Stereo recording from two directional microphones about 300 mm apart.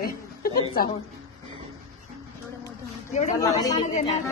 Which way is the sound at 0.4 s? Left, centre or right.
Left.